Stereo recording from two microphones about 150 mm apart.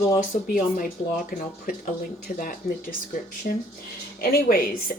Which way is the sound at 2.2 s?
65° left (ahead or behind).